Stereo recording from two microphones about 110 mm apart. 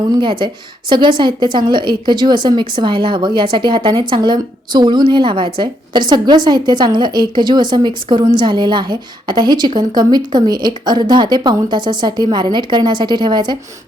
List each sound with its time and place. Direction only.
0.2 s a woman's voice: 45° right (ahead or behind)